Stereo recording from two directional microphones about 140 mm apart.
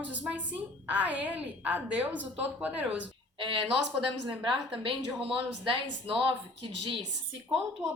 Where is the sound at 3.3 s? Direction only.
40° right (ahead or behind).